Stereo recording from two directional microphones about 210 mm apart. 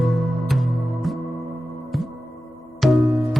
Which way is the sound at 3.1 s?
15° right (ahead or behind).